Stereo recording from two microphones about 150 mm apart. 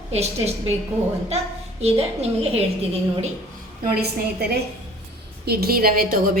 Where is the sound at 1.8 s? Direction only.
45° right (ahead or behind).